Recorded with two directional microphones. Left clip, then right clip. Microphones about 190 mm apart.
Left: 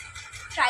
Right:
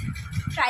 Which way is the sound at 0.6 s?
15° right (ahead or behind).